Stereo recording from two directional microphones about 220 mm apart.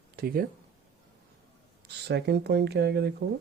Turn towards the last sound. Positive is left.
turn(degrees=-50)  # may be behind; listen again after turning